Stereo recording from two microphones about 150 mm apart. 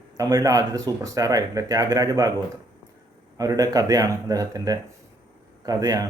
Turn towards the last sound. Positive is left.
turn(degrees=-25)  # may be behind; listen again after turning